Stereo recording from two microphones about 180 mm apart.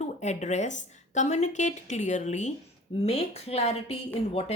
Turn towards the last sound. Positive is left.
turn(degrees=35)  # may be behind; listen again after turning